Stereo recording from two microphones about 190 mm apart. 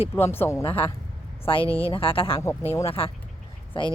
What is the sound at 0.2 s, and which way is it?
Speech, 10° left (ahead or behind).